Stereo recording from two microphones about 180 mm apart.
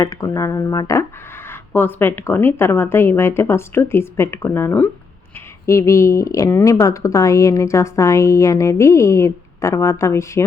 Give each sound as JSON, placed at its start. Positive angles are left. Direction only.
{"t": 0.0, "sound": "speech", "side_deg": 20}